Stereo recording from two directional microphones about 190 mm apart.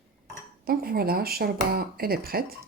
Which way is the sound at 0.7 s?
50° right (ahead or behind).